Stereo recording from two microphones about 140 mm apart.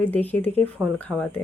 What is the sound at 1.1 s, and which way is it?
Speech, 10° right (ahead or behind).